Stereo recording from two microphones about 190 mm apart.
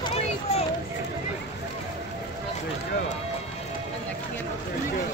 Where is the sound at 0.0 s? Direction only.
30° left (ahead or behind).